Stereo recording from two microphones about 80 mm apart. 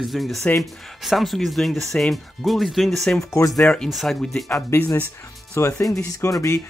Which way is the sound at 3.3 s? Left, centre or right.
Left.